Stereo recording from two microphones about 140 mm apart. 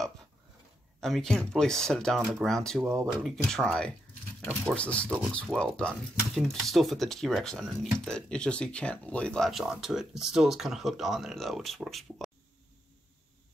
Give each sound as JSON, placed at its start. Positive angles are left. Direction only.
{"t": 1.0, "sound": "speech", "side_deg": 0}
{"t": 2.8, "sound": "speech", "side_deg": -20}
{"t": 3.1, "sound": "speech", "side_deg": -5}
{"t": 3.3, "sound": "speech", "side_deg": 5}